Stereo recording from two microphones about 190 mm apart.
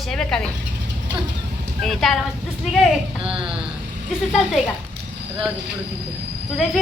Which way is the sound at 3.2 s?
25° right (ahead or behind).